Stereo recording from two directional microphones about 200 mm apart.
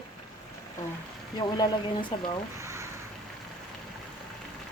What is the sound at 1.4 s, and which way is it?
Speech, 25° left (ahead or behind).